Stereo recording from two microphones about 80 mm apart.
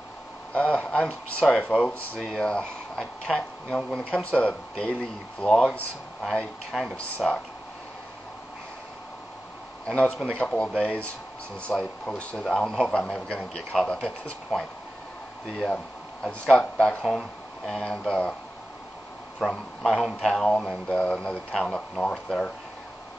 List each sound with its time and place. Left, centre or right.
0.6 s speech: centre
6.2 s speech: centre
7.0 s speech: centre
9.8 s speech: centre
10.7 s speech: centre
11.7 s speech: centre
12.1 s speech: centre
16.4 s speech: centre
17.0 s speech: centre
19.4 s speech: centre